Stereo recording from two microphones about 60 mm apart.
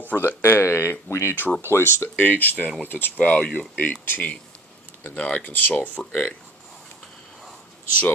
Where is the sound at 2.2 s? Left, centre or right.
Left.